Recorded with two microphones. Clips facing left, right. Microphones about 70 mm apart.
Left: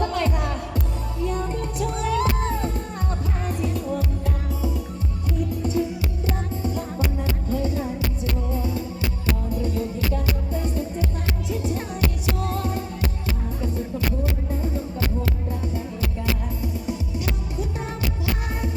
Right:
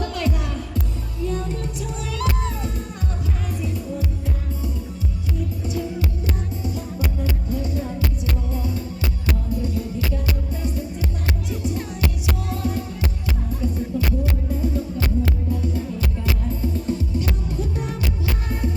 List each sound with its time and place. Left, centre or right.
0.0 s music: left
1.2 s music: left
7.5 s music: left
9.6 s music: left
12.4 s music: left
14.6 s music: left
16.9 s music: centre